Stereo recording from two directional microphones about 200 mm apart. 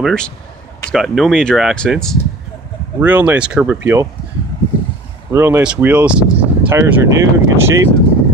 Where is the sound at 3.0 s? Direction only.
10° right (ahead or behind).